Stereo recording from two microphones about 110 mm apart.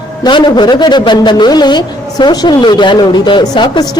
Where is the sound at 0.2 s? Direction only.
45° left (ahead or behind).